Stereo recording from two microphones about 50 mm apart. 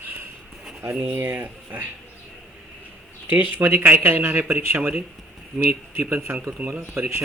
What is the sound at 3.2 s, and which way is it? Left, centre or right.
Speech, right.